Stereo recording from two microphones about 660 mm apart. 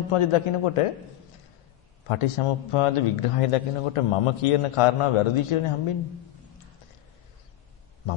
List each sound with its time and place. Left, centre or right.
0.1 s a man's voice: left
2.0 s a man's voice: left